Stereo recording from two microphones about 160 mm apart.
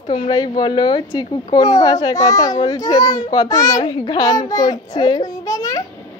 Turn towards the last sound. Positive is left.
turn(degrees=20)  # may be behind; listen again after turning